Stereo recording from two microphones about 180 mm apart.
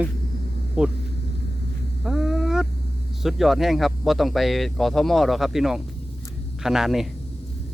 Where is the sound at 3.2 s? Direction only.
Centre (ahead or behind).